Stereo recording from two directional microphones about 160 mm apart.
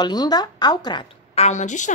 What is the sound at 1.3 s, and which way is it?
Speech, 45° left (ahead or behind).